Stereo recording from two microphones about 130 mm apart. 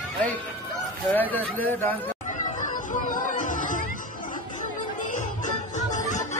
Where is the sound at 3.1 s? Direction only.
90° left.